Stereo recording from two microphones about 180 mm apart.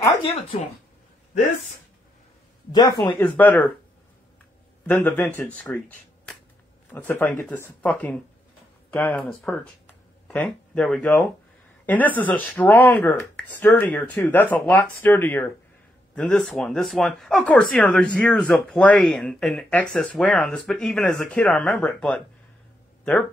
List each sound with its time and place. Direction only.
2.7 s speech: 25° left (ahead or behind)
3.2 s speech: 10° left (ahead or behind)
4.8 s speech: 10° left (ahead or behind)